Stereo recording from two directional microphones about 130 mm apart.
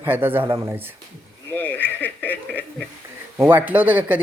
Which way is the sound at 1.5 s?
15° left (ahead or behind).